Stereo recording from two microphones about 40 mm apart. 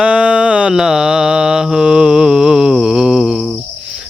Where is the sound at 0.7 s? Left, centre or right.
Centre.